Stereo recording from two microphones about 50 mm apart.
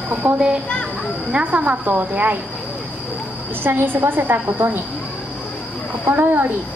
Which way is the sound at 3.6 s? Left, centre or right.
Right.